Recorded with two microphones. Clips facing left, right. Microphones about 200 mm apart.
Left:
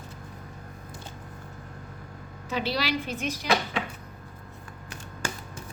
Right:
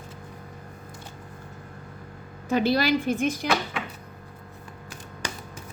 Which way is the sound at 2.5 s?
50° right (ahead or behind).